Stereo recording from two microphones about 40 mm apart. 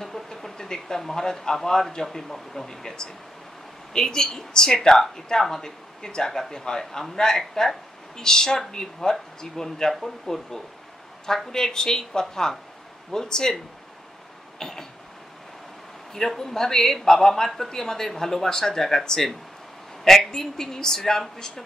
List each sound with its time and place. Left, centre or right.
0.0 s a woman's voice: centre
14.6 s a woman's voice: centre
16.1 s a woman's voice: centre